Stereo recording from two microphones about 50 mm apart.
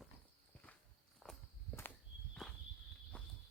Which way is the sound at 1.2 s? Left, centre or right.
Centre.